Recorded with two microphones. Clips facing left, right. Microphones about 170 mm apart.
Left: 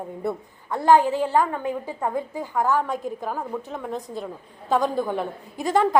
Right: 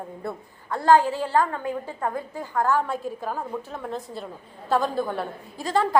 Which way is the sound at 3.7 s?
Centre (ahead or behind).